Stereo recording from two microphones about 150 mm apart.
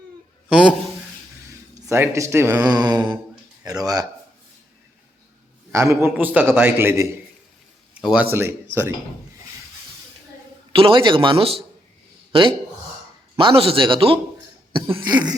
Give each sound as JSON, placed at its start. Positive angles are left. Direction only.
{"t": 0.5, "sound": "a man's voice", "side_deg": -5}
{"t": 1.7, "sound": "a man's voice", "side_deg": -20}
{"t": 2.6, "sound": "a sound", "side_deg": -30}
{"t": 5.7, "sound": "a man's voice", "side_deg": -20}
{"t": 10.7, "sound": "speech", "side_deg": -35}
{"t": 15.0, "sound": "a sound", "side_deg": -30}